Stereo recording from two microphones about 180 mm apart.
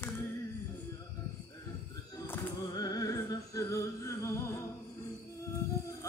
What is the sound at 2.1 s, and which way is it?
Music, 15° left (ahead or behind).